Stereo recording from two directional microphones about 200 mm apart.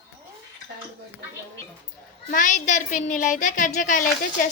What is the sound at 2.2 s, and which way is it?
A woman's voice, 40° left (ahead or behind).